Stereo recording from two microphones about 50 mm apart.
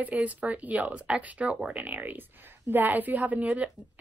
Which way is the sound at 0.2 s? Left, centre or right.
Right.